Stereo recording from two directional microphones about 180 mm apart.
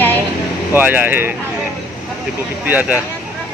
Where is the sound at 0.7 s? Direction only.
10° right (ahead or behind).